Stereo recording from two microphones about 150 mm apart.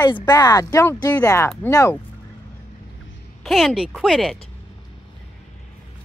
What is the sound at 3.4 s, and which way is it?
Speech, centre (ahead or behind).